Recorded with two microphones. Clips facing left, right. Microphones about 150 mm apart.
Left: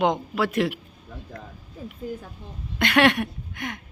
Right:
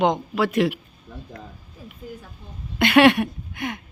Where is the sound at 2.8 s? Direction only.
5° right (ahead or behind).